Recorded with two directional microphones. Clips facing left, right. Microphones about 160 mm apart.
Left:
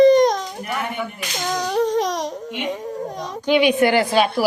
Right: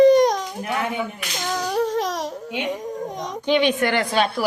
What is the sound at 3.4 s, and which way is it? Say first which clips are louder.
A woman's voice: left 3 dB; 10° left (ahead or behind).